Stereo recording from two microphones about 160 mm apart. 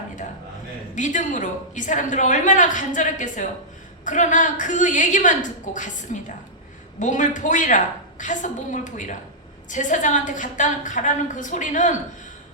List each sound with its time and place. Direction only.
0.9 s a woman's voice: 50° left (ahead or behind)